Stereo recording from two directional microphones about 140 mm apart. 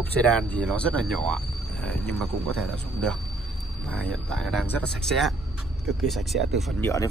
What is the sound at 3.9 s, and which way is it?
Speech, 5° left (ahead or behind).